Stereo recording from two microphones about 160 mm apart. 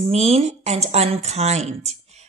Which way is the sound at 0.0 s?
40° right (ahead or behind).